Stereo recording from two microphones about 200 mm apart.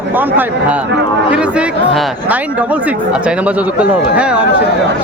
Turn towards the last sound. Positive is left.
turn(degrees=-5)  # may be behind; listen again after turning